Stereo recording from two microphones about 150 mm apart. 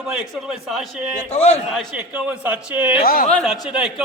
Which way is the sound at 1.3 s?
45° left (ahead or behind).